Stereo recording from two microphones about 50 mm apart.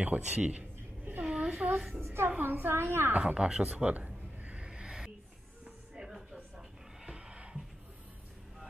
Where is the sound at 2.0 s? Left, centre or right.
Right.